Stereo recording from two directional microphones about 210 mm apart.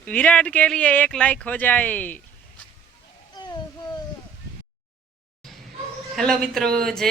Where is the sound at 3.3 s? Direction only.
20° left (ahead or behind).